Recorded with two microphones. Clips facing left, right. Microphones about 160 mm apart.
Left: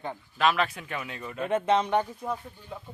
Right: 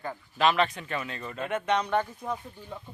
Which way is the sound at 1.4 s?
30° left (ahead or behind).